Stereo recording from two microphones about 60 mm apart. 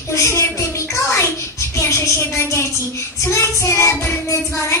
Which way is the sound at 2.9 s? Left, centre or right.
Left.